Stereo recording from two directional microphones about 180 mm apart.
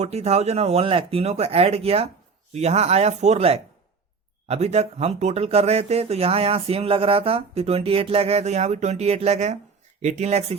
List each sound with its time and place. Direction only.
0.0 s speech: 35° right (ahead or behind)